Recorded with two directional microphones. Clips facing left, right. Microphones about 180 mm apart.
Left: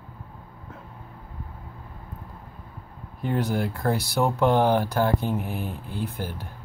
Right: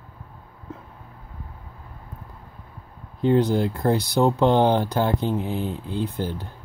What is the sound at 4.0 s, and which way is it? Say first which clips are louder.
Speech: right 3 dB; 20° right (ahead or behind).